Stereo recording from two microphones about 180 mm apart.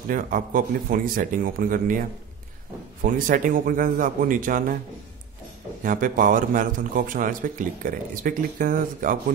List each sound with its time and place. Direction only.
0.1 s a man's voice: 50° right (ahead or behind)
5.9 s a man's voice: 50° right (ahead or behind)